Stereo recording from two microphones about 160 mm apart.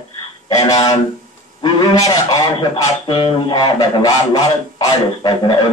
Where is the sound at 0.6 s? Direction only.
25° left (ahead or behind).